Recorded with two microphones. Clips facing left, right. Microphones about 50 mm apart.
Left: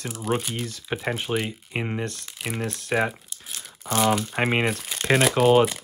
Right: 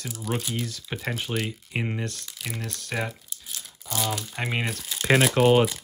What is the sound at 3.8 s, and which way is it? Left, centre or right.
Speech, left.